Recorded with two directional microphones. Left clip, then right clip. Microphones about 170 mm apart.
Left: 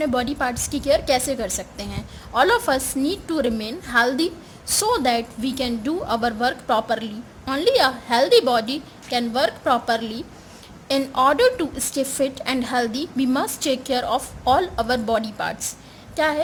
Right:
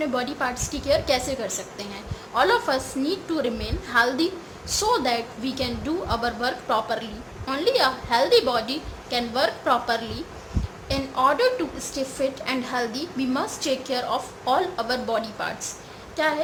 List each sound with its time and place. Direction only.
0.0 s a woman's voice: 50° left (ahead or behind)